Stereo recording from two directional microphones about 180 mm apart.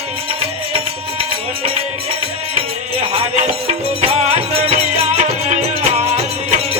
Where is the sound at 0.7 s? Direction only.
30° right (ahead or behind).